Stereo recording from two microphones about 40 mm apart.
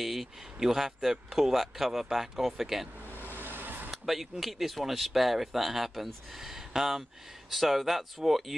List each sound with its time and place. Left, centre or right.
0.0 s a sound: centre
0.6 s speech: centre
3.2 s vehicle: right
3.9 s speech: centre